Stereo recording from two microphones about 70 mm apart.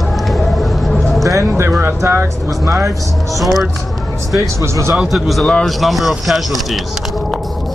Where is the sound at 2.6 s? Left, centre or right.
Right.